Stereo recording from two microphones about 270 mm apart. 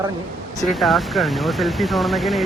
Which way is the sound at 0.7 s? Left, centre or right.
Centre.